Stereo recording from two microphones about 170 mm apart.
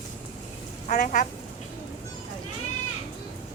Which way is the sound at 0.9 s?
50° left (ahead or behind).